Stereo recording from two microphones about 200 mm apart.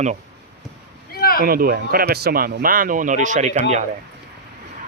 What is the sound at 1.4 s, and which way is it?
Speech, 45° right (ahead or behind).